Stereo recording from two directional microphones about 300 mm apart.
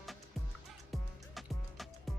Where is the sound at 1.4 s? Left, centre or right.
Centre.